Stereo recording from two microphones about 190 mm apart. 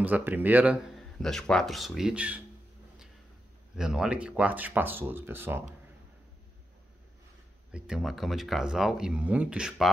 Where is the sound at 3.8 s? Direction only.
5° right (ahead or behind).